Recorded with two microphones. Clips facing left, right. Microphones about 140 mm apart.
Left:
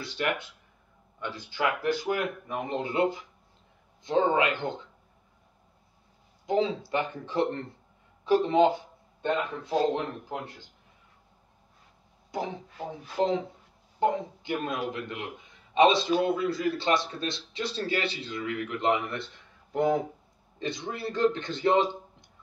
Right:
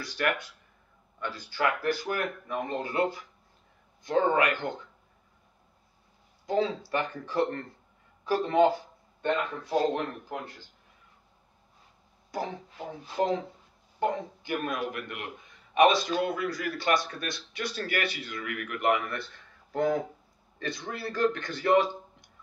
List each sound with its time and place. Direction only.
0.0 s a man's voice: 20° left (ahead or behind)
6.4 s a man's voice: 20° left (ahead or behind)
12.3 s a man's voice: 20° left (ahead or behind)